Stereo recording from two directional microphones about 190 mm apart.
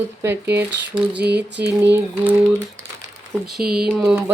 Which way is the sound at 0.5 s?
5° right (ahead or behind).